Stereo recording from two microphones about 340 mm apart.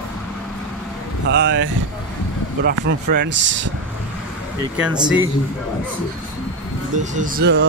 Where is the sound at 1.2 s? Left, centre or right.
Right.